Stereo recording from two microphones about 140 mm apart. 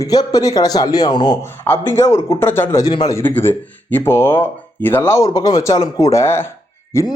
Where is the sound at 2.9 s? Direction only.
30° left (ahead or behind).